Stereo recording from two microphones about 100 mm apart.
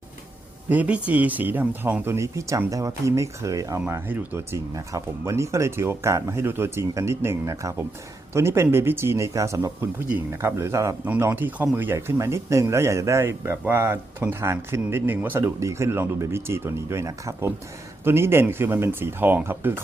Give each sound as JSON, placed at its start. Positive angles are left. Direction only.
{"t": 0.7, "sound": "speech", "side_deg": -15}
{"t": 10.1, "sound": "speech", "side_deg": -20}